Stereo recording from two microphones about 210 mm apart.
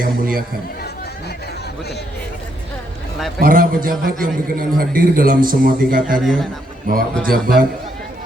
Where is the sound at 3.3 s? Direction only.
45° right (ahead or behind).